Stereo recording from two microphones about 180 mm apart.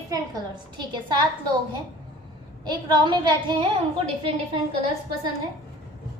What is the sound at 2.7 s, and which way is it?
A woman's voice, 25° right (ahead or behind).